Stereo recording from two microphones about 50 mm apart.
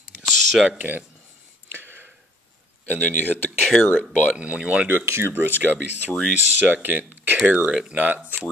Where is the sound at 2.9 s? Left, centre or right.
Left.